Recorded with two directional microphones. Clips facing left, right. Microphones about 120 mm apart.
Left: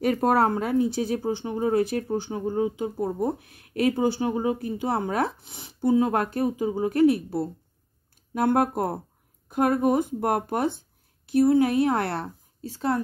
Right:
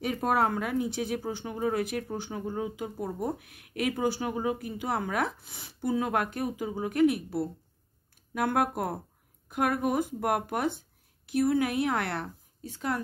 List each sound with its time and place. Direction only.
0.0 s speech: 40° left (ahead or behind)